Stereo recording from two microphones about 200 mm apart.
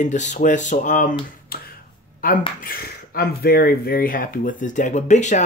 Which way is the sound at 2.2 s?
45° left (ahead or behind).